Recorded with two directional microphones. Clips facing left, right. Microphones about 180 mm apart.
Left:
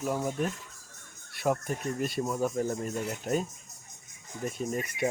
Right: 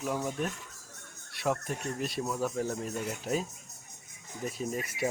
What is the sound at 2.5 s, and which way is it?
Speech, centre (ahead or behind).